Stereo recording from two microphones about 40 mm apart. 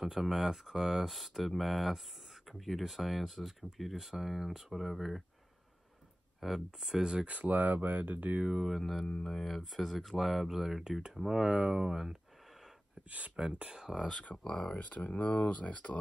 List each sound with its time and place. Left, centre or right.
0.0 s speech: centre
6.4 s speech: centre
7.0 s speech: centre
7.2 s speech: right
8.4 s speech: centre
8.6 s speech: centre
9.0 s speech: centre
9.3 s speech: centre
12.4 s a sound: centre
13.1 s speech: right
14.5 s speech: left